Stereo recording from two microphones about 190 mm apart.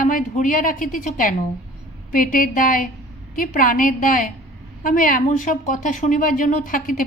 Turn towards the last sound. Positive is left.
turn(degrees=45)  # may be behind; listen again after turning